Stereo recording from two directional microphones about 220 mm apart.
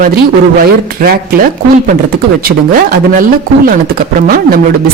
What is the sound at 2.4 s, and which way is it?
Speech, 40° right (ahead or behind).